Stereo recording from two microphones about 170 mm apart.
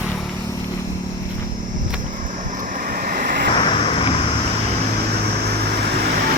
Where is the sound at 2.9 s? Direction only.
60° right (ahead or behind).